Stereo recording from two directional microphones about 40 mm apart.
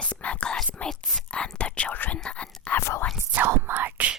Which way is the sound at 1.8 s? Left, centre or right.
Left.